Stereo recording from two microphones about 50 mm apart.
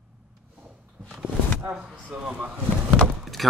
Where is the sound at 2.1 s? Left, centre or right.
Right.